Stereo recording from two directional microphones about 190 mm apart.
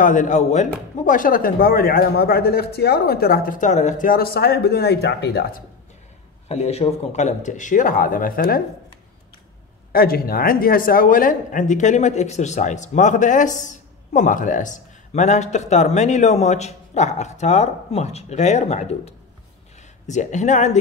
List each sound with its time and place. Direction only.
0.0 s speech: 40° left (ahead or behind)
6.5 s speech: 35° left (ahead or behind); by 8.6 s 50° left (ahead or behind)
9.9 s speech: 50° left (ahead or behind)